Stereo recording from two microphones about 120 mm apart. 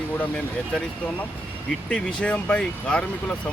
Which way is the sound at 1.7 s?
10° left (ahead or behind).